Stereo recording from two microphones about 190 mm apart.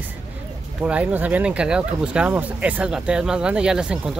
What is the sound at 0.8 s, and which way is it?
Speech, 5° right (ahead or behind).